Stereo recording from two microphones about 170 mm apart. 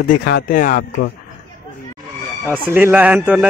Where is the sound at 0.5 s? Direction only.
50° left (ahead or behind).